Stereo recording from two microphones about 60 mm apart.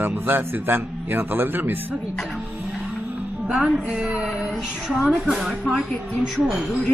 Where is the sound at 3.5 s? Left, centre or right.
Centre.